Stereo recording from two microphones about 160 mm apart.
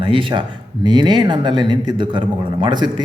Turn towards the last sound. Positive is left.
turn(degrees=-30)  # may be behind; listen again after turning